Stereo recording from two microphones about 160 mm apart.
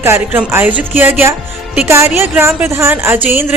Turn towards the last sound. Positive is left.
turn(degrees=-15)  # may be behind; listen again after turning